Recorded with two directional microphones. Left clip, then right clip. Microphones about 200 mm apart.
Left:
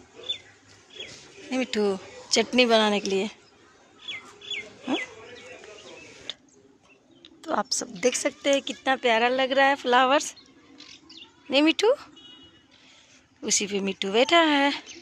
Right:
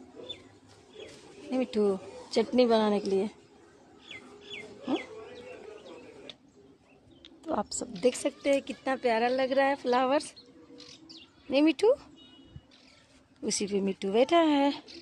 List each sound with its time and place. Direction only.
1.5 s a woman's voice: 5° right (ahead or behind)
4.1 s chicken: 30° right (ahead or behind)
6.3 s a sound: centre (ahead or behind)
7.7 s speech: 15° left (ahead or behind)
8.0 s a woman's voice: 5° right (ahead or behind)
10.8 s bird: 60° right (ahead or behind)
11.4 s a woman's voice: centre (ahead or behind)
13.5 s a woman's voice: 10° right (ahead or behind)